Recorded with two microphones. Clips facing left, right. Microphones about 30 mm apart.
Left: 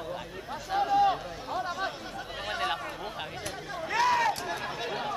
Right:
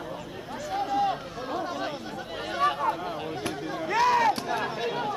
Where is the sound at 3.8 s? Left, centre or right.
Centre.